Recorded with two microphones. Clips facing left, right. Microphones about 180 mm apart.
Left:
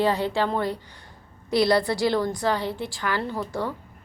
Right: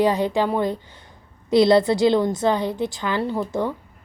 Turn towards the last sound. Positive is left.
turn(degrees=-15)  # may be behind; listen again after turning